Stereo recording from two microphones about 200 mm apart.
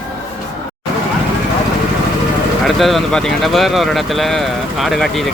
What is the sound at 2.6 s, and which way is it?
Speech, centre (ahead or behind).